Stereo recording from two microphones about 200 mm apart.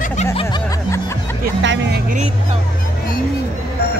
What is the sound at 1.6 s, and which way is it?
Speech, 65° right (ahead or behind).